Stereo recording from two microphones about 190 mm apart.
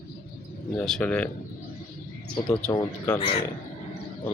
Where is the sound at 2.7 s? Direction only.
15° left (ahead or behind).